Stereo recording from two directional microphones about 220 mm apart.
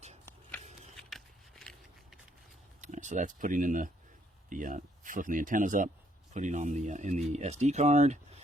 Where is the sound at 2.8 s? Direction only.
35° right (ahead or behind).